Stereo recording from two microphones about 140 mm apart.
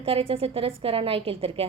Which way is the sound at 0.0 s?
40° right (ahead or behind).